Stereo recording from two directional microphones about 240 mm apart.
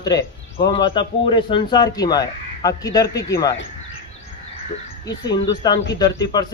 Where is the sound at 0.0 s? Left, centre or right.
Centre.